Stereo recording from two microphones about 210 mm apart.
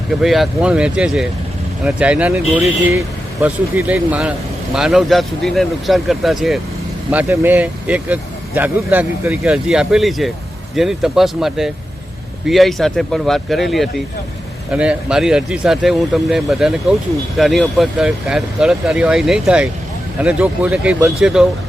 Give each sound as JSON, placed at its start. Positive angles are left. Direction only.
{"t": 0.1, "sound": "a man's voice", "side_deg": 0}